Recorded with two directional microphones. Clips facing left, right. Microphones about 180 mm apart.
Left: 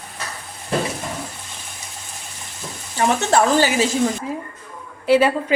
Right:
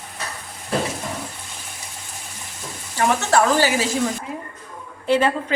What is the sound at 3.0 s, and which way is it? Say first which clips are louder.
Speech: left 1 dB; 20° left (ahead or behind).